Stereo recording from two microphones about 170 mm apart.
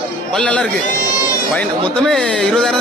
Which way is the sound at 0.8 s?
55° left (ahead or behind).